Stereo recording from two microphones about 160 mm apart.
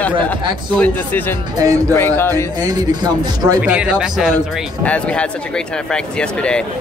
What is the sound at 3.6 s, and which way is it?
Speech, 5° right (ahead or behind).